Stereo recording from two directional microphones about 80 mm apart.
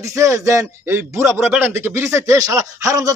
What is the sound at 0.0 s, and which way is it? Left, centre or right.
Speech, right.